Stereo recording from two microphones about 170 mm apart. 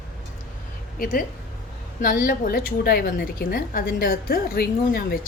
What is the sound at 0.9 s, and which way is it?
A woman's voice, 50° left (ahead or behind).